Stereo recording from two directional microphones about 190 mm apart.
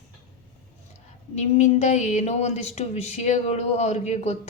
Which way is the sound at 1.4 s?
35° left (ahead or behind).